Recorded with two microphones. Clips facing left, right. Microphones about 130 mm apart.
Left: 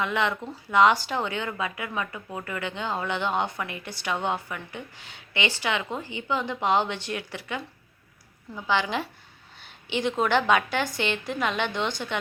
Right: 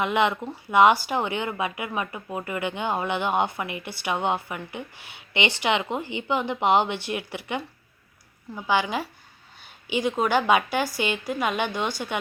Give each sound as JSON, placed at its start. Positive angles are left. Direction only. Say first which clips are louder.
{"t": 0.0, "sound": "speech", "louder": "right 4 dB", "side_deg": -15}